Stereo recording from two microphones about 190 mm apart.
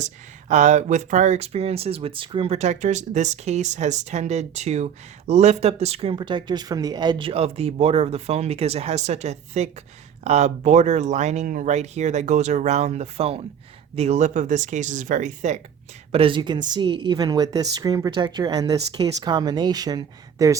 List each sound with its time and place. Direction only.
0.0 s speech: 40° right (ahead or behind)
16.1 s a woman's voice: 25° right (ahead or behind)